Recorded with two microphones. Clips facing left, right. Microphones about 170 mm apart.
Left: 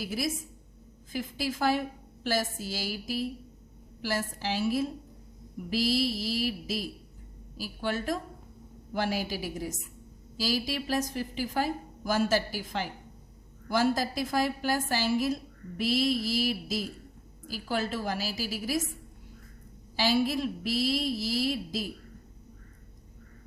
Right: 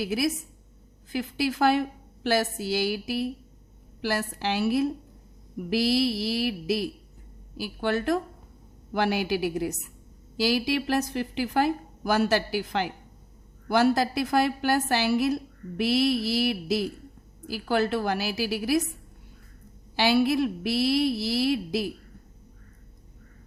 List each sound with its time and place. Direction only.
0.0 s a woman's voice: 65° right (ahead or behind)
20.0 s a woman's voice: 65° right (ahead or behind)